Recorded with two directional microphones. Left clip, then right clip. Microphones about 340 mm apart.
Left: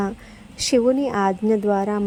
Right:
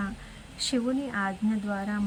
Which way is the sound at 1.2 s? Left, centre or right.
Left.